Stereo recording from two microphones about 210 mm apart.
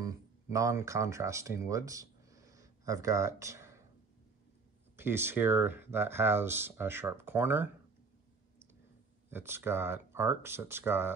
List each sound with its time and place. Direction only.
0.0 s speech: 15° right (ahead or behind)
4.9 s speech: 10° right (ahead or behind)
9.3 s speech: 10° right (ahead or behind)